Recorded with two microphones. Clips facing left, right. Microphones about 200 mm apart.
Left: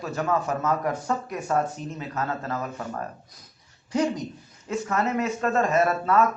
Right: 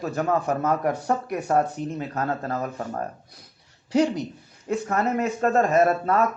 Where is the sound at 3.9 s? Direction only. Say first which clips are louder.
Right 3 dB; 70° right (ahead or behind).